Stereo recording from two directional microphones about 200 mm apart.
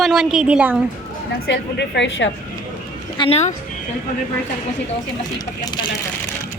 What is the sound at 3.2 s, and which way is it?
Speech, 30° left (ahead or behind).